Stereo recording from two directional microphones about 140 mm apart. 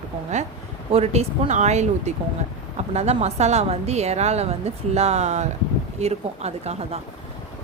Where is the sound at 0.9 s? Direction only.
45° right (ahead or behind).